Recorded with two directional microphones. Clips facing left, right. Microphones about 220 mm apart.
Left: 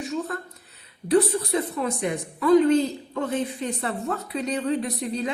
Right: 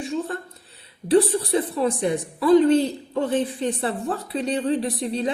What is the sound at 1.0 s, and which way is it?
A woman's voice, 30° right (ahead or behind).